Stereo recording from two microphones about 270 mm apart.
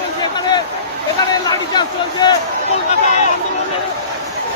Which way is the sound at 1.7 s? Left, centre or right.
Centre.